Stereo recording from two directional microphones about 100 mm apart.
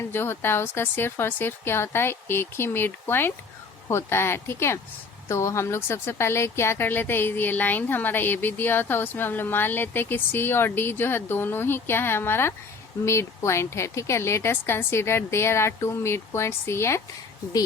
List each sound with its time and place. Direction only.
0.0 s speech: 25° left (ahead or behind)